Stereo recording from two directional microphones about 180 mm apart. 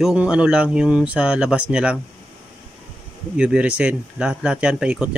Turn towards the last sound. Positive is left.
turn(degrees=-5)  # may be behind; listen again after turning